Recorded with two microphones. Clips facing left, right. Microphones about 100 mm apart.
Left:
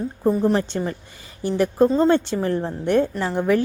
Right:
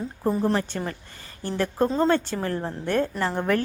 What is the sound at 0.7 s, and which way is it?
A woman's voice, 20° left (ahead or behind).